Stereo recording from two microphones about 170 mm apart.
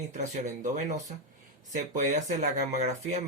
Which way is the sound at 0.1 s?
45° right (ahead or behind).